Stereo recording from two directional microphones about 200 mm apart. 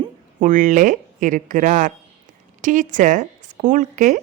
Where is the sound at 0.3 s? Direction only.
40° right (ahead or behind).